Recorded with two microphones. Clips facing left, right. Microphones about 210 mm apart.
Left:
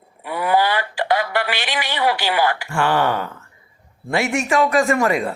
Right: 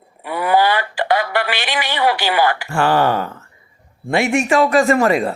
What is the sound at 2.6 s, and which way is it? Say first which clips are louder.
Speech: right 3 dB; 40° right (ahead or behind).